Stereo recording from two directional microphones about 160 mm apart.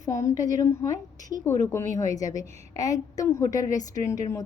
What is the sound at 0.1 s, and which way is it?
A woman's voice, 15° left (ahead or behind).